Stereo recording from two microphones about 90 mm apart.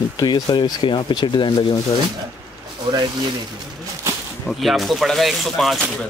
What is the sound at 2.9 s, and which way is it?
Speech, 55° right (ahead or behind).